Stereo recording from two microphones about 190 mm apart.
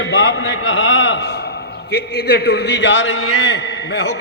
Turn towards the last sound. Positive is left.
turn(degrees=60)  # may be behind; listen again after turning